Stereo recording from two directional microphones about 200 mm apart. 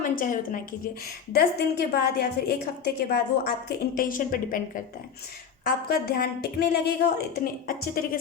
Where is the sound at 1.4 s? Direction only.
50° left (ahead or behind).